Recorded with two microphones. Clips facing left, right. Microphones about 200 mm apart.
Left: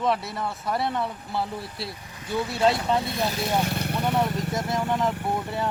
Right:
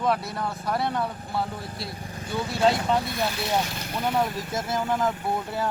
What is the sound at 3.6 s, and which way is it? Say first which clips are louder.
Vehicle: left 6 dB; 60° left (ahead or behind).